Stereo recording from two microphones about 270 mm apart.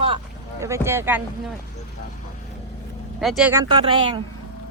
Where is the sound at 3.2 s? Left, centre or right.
Centre.